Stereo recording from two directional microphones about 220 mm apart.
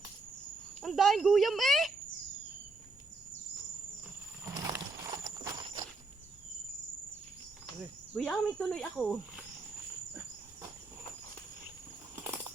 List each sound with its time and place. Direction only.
0.8 s speech: centre (ahead or behind)
4.4 s horse: 15° right (ahead or behind)
8.1 s speech: centre (ahead or behind)
12.1 s bird flight: 10° right (ahead or behind)